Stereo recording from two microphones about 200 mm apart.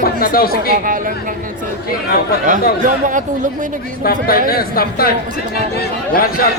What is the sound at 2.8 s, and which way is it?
Speech, 40° right (ahead or behind).